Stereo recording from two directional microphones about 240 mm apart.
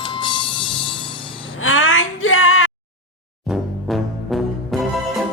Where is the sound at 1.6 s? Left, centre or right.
Left.